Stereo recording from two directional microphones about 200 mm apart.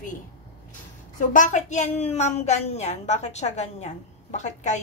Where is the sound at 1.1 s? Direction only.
40° left (ahead or behind).